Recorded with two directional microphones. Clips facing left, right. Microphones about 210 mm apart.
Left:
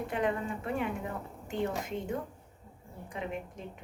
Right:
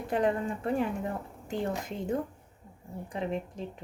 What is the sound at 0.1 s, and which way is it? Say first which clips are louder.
Speech: right 6 dB; 35° right (ahead or behind).